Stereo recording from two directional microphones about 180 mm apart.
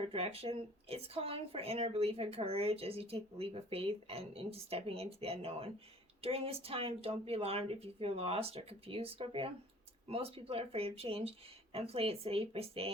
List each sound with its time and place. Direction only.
0.1 s speech: 35° right (ahead or behind)